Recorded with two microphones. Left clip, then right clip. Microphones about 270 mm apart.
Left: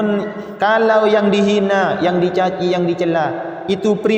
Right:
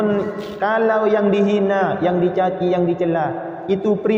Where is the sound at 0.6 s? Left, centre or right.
Left.